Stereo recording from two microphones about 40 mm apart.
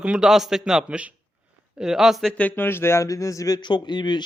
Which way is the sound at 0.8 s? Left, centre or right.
Right.